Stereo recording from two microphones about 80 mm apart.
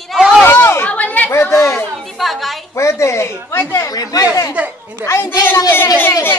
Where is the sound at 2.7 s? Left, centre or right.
Left.